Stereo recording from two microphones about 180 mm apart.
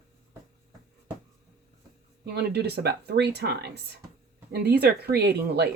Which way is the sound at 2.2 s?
60° right (ahead or behind).